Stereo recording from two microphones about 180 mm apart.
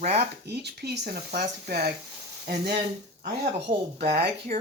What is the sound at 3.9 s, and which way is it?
Speech, 60° right (ahead or behind).